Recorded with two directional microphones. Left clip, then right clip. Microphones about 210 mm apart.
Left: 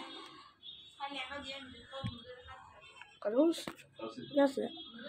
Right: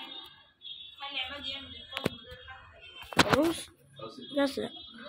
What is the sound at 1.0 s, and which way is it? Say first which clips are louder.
Speech: right 5 dB; 50° left (ahead or behind).